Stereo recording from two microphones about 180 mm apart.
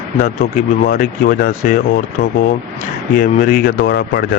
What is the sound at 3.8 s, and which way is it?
Speech, 65° left (ahead or behind).